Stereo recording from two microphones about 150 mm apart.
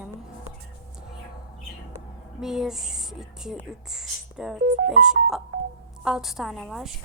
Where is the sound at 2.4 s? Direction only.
5° right (ahead or behind).